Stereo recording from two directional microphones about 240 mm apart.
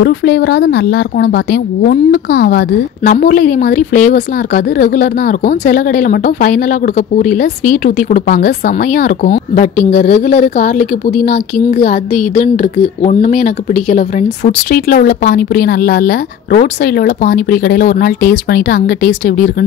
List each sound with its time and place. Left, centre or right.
0.0 s a woman's voice: left